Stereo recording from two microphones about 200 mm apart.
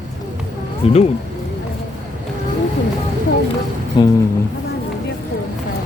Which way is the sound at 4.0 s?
25° left (ahead or behind).